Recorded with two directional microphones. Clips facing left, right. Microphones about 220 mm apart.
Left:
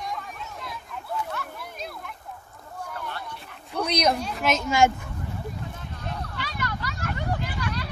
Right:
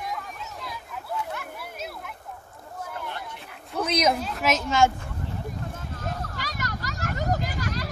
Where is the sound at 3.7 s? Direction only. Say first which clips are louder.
Even; 5° right (ahead or behind).